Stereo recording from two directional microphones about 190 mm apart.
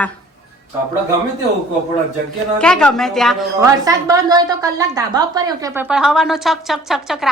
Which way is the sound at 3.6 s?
20° right (ahead or behind).